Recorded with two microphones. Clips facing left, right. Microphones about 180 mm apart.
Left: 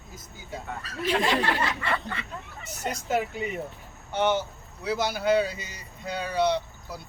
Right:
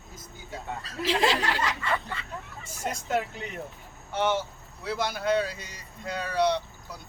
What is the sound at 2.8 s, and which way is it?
Speech, 5° left (ahead or behind).